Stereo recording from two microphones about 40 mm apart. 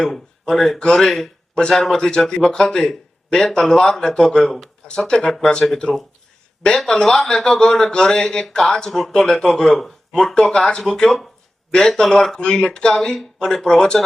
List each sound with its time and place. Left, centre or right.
0.0 s a man's voice: centre
6.7 s a man's voice: centre